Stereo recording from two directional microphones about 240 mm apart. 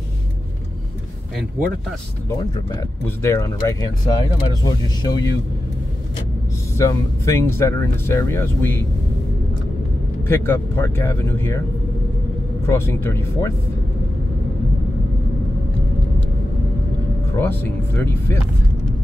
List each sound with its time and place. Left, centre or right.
2.2 s speech: centre
6.8 s speech: centre
10.2 s speech: centre
12.6 s speech: centre
17.4 s speech: centre